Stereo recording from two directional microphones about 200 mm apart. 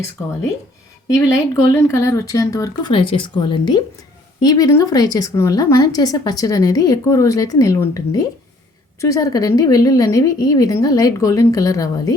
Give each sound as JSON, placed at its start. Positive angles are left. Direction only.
{"t": 1.0, "sound": "a woman's voice", "side_deg": 15}